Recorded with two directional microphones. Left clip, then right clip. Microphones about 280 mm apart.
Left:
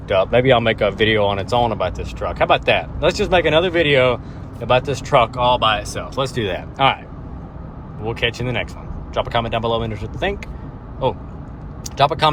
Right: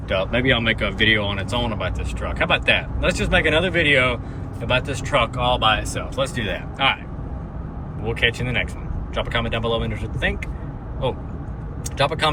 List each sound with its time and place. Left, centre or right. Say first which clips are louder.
0.1 s speech: left 6 dB; left
8.0 s speech: even; centre
11.9 s speech: left 5 dB; centre